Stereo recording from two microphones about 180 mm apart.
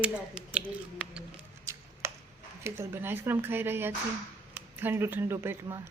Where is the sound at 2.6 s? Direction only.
10° right (ahead or behind).